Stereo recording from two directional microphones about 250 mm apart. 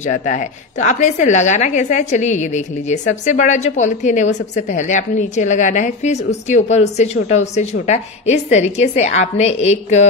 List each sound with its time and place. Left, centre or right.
0.0 s a woman's voice: left